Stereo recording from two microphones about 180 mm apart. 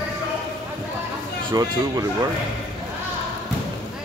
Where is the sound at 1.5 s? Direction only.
20° right (ahead or behind).